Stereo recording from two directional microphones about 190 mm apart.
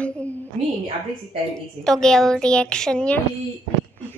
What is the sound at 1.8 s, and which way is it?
A woman's voice, 5° left (ahead or behind).